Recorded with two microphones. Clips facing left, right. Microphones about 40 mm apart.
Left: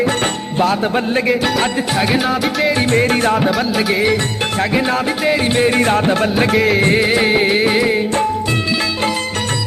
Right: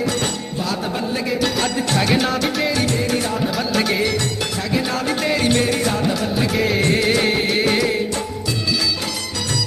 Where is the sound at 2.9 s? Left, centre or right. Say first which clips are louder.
Left 7 dB; left.